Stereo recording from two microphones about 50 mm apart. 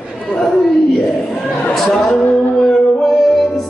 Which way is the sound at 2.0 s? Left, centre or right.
Centre.